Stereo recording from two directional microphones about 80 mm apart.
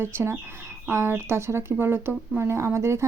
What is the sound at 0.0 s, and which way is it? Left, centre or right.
Speech, right.